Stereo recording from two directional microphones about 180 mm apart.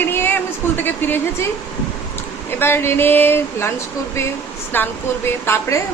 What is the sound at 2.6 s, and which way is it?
Speech, 15° left (ahead or behind).